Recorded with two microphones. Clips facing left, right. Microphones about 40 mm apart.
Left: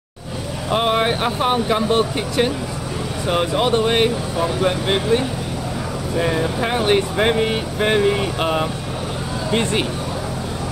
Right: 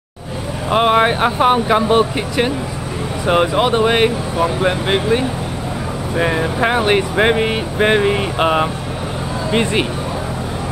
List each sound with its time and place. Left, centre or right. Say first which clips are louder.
0.7 s speech: right 5 dB; right
3.3 s speech: right 4 dB; right